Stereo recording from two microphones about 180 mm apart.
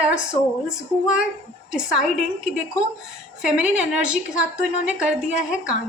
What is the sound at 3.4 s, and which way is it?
A woman's voice, 5° right (ahead or behind).